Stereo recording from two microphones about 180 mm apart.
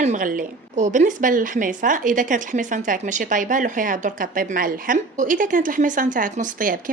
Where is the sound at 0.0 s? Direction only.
45° right (ahead or behind).